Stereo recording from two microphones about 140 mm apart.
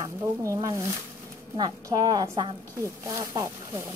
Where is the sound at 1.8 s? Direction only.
25° right (ahead or behind).